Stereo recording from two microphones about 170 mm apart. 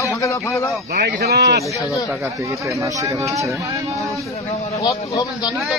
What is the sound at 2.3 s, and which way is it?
Speech, 20° right (ahead or behind).